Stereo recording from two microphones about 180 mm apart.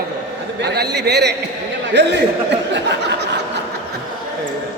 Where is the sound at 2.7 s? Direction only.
70° right (ahead or behind).